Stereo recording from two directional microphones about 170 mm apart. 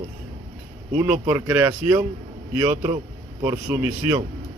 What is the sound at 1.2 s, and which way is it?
Speech, 25° right (ahead or behind).